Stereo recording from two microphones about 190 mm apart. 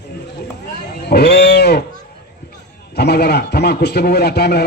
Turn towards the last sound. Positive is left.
turn(degrees=60)  # may be behind; listen again after turning